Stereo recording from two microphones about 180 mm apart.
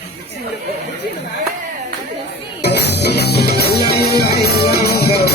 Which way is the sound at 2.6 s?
65° left (ahead or behind).